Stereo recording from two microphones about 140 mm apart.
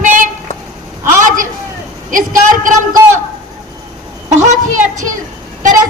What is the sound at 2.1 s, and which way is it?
Speech, 70° right (ahead or behind).